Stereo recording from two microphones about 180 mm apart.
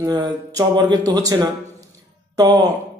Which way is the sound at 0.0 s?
20° right (ahead or behind).